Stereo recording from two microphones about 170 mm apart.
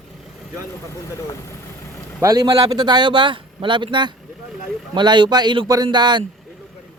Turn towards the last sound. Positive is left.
turn(degrees=-25)  # may be behind; listen again after turning